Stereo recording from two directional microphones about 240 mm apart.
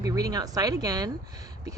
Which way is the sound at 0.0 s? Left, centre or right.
Centre.